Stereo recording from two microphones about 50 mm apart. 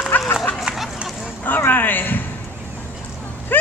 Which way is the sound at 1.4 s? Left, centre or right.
Left.